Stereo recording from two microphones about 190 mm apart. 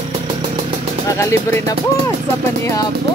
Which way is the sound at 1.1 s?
15° left (ahead or behind).